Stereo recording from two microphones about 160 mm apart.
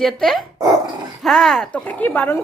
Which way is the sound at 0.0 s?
Centre (ahead or behind).